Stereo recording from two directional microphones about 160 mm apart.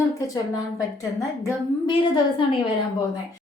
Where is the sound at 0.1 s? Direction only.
20° left (ahead or behind).